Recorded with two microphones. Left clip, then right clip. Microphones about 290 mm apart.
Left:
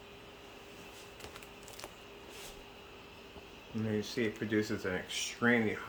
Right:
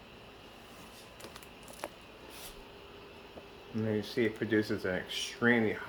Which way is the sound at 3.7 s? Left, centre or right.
Centre.